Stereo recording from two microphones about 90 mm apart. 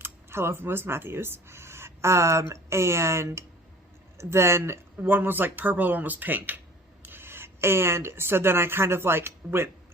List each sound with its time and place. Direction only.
0.0 s speech: 30° right (ahead or behind)